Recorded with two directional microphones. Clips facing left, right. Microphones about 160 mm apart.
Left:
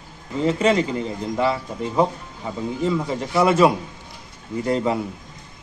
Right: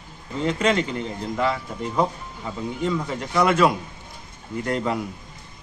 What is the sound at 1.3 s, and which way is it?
A man's voice, 10° left (ahead or behind).